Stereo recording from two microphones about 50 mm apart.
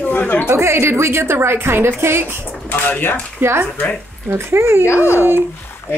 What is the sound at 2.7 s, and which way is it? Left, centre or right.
Speech, left.